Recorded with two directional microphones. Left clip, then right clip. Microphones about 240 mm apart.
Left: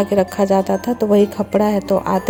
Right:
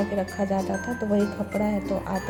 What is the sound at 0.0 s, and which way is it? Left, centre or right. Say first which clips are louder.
Speech: left 11 dB; left.